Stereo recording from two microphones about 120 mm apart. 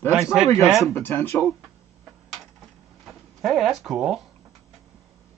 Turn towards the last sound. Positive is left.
turn(degrees=-5)  # may be behind; listen again after turning